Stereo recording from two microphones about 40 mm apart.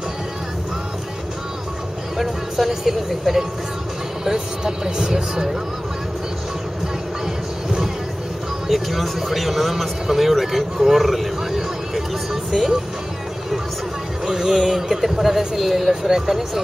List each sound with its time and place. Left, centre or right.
2.1 s speech: centre
8.6 s speech: centre
14.2 s speech: centre